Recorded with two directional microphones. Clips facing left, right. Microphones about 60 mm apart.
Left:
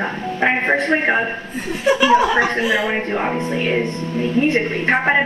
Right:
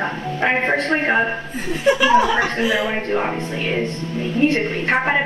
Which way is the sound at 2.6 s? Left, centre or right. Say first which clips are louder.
Left 1 dB; centre.